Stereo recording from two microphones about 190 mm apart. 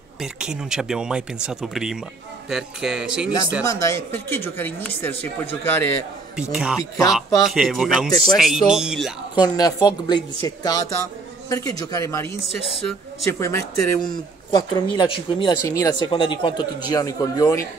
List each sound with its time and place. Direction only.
0.2 s speech: 5° right (ahead or behind)
3.6 s speech: 15° left (ahead or behind)
6.3 s speech: 5° right (ahead or behind)
9.3 s speech: 20° left (ahead or behind)
12.4 s speech: 30° left (ahead or behind)
12.8 s speech: 15° left (ahead or behind)